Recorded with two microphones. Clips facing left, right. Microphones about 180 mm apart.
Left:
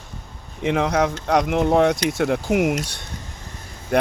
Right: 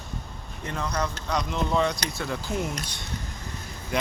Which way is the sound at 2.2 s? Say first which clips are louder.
Left 10 dB; 75° left (ahead or behind).